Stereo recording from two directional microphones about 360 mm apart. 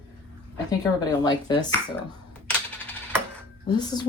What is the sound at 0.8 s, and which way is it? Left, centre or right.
Speech, centre.